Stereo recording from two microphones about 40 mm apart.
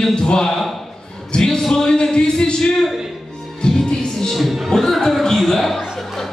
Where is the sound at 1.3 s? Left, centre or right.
Centre.